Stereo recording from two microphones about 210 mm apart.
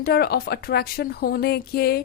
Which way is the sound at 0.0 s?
50° left (ahead or behind).